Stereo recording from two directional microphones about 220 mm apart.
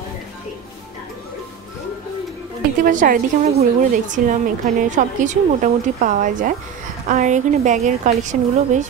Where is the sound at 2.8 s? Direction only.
40° right (ahead or behind).